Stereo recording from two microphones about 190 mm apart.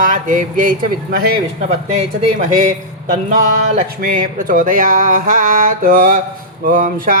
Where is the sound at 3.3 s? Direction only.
45° right (ahead or behind).